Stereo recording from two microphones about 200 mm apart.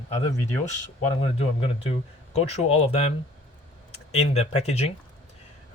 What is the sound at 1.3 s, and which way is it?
Speech, 30° left (ahead or behind).